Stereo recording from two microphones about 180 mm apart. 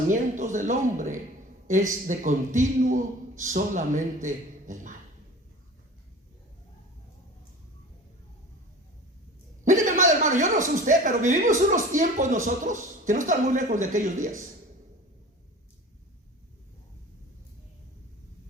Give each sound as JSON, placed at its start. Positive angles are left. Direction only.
{"t": 0.1, "sound": "a man's voice", "side_deg": -45}
{"t": 9.6, "sound": "a man's voice", "side_deg": -45}